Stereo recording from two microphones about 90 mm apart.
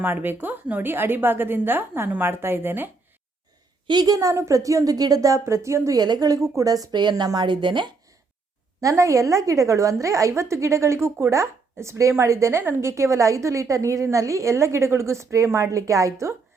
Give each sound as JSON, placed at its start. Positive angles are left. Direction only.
{"t": 0.0, "sound": "a woman's voice", "side_deg": -20}
{"t": 3.8, "sound": "a woman's voice", "side_deg": -50}
{"t": 6.0, "sound": "speech", "side_deg": -45}
{"t": 8.8, "sound": "a woman's voice", "side_deg": -35}